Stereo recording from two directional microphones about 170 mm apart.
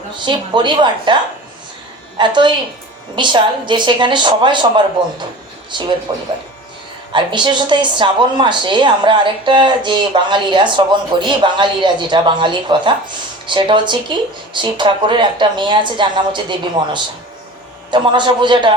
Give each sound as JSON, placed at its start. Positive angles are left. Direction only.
{"t": 0.3, "sound": "speech", "side_deg": -25}
{"t": 2.1, "sound": "speech", "side_deg": -25}
{"t": 5.7, "sound": "speech", "side_deg": -25}